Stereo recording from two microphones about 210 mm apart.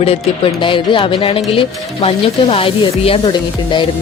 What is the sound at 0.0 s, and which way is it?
Speech, 25° left (ahead or behind).